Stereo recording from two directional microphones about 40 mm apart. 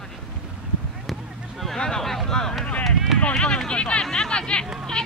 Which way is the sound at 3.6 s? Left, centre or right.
Left.